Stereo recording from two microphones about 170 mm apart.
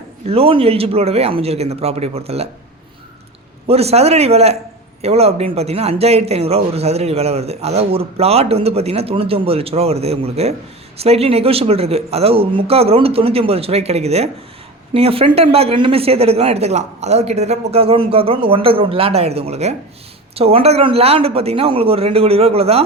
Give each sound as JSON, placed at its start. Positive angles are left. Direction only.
{"t": 0.3, "sound": "a man's voice", "side_deg": -35}
{"t": 3.7, "sound": "a man's voice", "side_deg": -35}